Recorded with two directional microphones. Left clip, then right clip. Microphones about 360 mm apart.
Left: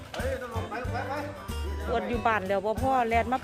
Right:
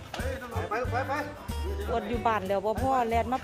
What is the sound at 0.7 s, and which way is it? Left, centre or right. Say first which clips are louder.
Speech: right 4 dB; centre.